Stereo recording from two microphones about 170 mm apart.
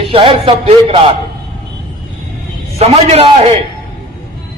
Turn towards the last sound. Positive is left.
turn(degrees=-35)  # may be behind; listen again after turning